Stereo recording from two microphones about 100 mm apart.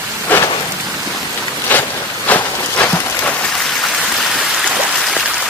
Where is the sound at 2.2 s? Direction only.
15° left (ahead or behind).